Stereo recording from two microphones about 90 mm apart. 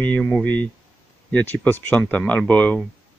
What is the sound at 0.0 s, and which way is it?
Speech, 15° left (ahead or behind).